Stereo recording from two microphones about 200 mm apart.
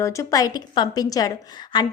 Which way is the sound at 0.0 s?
15° left (ahead or behind).